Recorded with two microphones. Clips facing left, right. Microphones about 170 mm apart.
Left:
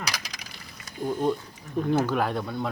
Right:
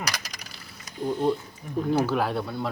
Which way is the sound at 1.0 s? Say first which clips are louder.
Right 1 dB; 10° left (ahead or behind).